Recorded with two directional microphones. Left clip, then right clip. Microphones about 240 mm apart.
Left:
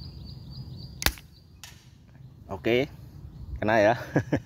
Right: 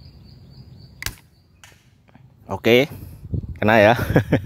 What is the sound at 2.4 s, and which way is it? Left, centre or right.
Speech, right.